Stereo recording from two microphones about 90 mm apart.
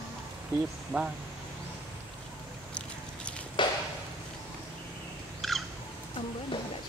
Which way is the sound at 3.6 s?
65° left (ahead or behind).